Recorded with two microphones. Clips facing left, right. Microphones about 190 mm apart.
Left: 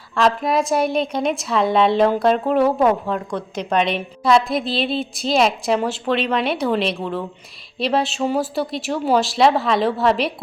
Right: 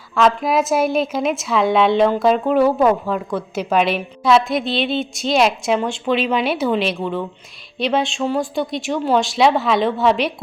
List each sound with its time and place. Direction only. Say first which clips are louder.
0.1 s a woman's voice: right 2 dB; centre (ahead or behind)